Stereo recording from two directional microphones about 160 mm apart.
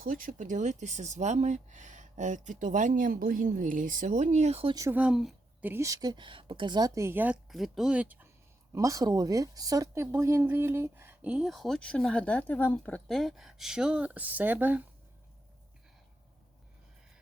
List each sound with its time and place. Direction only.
0.0 s speech: 55° right (ahead or behind)
4.7 s a woman's voice: 20° right (ahead or behind)
4.9 s a woman's voice: 5° right (ahead or behind)
5.7 s a woman's voice: 20° right (ahead or behind)
7.5 s speech: centre (ahead or behind)
8.7 s speech: 20° right (ahead or behind)